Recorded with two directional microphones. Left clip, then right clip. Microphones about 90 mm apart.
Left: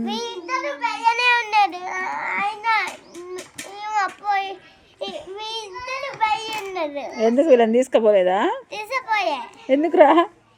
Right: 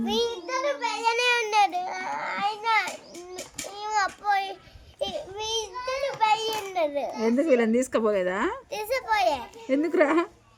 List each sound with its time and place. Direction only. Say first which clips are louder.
0.0 s a sound: right 1 dB; 30° right (ahead or behind)
3.8 s child singing: left 3 dB; 30° right (ahead or behind)
4.9 s a sound: left 1 dB; 40° right (ahead or behind)
6.0 s child singing: left 1 dB; 40° right (ahead or behind)
6.6 s babbling: even; 35° right (ahead or behind)
7.2 s a child's voice: left 8 dB; 35° right (ahead or behind); by 8.5 s 20° right (ahead or behind)
8.7 s a sound: left 3 dB; 40° right (ahead or behind)
9.7 s a child's voice: left 6 dB; 25° right (ahead or behind)
10.0 s a woman's voice: left 10 dB; 35° right (ahead or behind)